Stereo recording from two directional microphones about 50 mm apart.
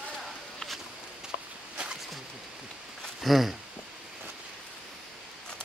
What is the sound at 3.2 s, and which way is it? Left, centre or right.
Speech, centre.